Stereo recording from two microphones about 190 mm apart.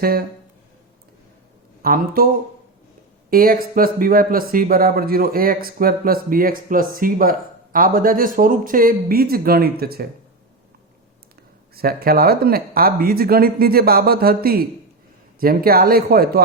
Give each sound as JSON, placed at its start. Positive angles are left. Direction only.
{"t": 1.8, "sound": "speech", "side_deg": -50}
{"t": 11.7, "sound": "speech", "side_deg": -55}